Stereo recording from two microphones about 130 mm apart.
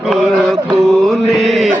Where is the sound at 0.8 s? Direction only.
Centre (ahead or behind).